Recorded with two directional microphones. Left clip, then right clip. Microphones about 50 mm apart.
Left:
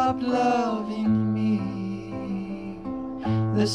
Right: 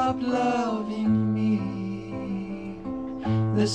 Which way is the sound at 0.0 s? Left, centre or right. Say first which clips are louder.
Left 2 dB; left.